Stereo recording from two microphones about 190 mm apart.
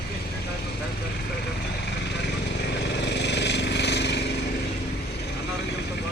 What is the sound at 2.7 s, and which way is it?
Vehicle, 65° left (ahead or behind).